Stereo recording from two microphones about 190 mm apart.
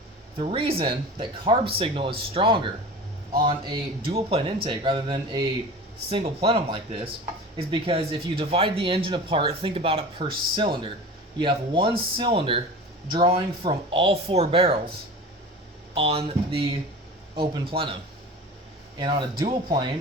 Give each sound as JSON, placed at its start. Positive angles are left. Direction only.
{"t": 0.3, "sound": "speech", "side_deg": -30}
{"t": 16.0, "sound": "speech", "side_deg": -30}
{"t": 18.9, "sound": "speech", "side_deg": -25}